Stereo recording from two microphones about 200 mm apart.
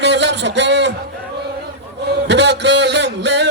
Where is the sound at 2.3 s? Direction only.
60° right (ahead or behind).